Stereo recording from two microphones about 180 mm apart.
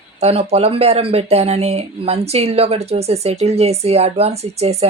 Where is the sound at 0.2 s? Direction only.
35° right (ahead or behind).